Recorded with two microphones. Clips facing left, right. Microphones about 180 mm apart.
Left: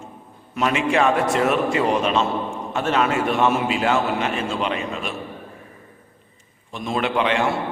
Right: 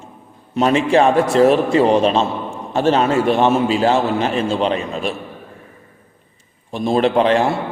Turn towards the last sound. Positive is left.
turn(degrees=-35)  # may be behind; listen again after turning